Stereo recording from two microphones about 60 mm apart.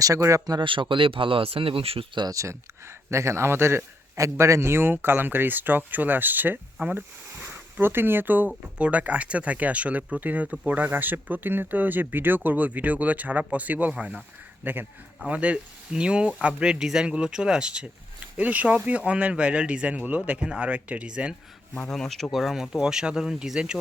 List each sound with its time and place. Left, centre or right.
0.0 s a man's voice: right
2.2 s speech: right
4.2 s a man's voice: right
4.7 s speech: right
14.6 s speech: right
15.2 s speech: right
18.3 s speech: right
21.8 s speech: centre